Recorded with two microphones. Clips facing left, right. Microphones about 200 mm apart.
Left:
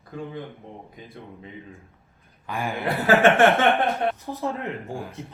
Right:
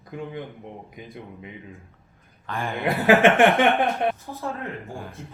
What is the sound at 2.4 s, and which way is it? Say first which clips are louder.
Speech: even; 10° left (ahead or behind).